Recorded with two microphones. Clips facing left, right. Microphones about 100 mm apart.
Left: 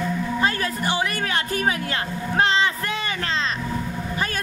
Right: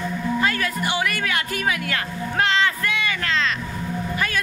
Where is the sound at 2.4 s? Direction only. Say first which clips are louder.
Even; 25° left (ahead or behind).